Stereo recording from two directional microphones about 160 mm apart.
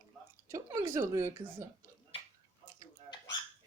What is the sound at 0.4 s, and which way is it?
A woman's voice, 20° right (ahead or behind).